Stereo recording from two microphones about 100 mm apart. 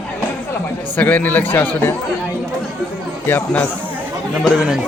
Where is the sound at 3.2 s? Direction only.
20° left (ahead or behind).